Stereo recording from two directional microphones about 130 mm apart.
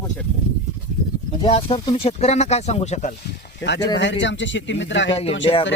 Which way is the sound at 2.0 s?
55° left (ahead or behind).